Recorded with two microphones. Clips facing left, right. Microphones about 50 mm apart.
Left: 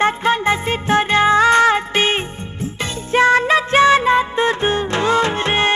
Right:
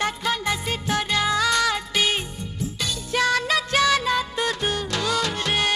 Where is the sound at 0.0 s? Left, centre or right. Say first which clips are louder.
Left 9 dB; left.